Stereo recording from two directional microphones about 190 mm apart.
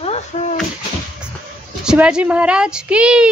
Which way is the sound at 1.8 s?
5° right (ahead or behind).